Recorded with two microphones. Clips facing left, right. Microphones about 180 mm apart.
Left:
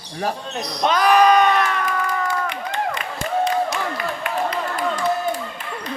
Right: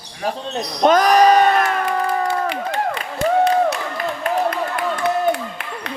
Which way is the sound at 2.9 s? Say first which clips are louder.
Right 6 dB; 65° right (ahead or behind).